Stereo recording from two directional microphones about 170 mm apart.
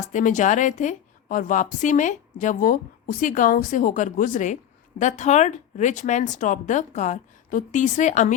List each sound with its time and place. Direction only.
0.0 s a woman's voice: 50° left (ahead or behind)